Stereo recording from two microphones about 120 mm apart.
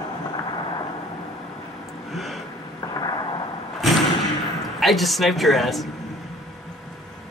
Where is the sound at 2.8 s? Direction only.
30° left (ahead or behind).